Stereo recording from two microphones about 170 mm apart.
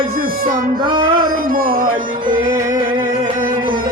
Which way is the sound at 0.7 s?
25° right (ahead or behind).